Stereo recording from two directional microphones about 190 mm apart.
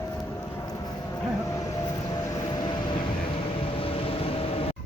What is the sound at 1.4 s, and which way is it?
Vehicle, 15° left (ahead or behind).